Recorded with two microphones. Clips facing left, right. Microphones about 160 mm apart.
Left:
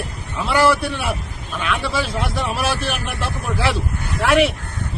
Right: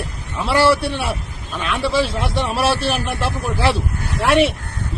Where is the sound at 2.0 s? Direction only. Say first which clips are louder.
Right 2 dB; centre (ahead or behind).